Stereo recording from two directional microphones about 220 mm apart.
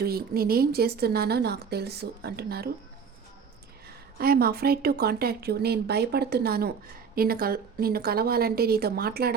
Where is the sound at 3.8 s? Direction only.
45° right (ahead or behind).